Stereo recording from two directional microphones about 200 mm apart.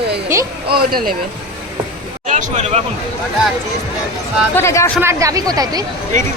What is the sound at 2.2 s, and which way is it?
Speech, 35° right (ahead or behind).